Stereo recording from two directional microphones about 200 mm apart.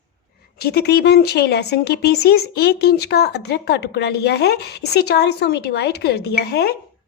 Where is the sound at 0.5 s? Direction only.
50° left (ahead or behind).